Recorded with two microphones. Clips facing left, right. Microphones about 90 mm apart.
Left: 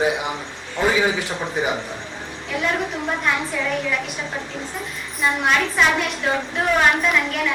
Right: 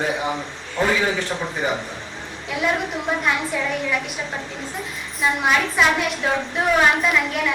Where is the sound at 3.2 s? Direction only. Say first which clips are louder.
Even; centre (ahead or behind).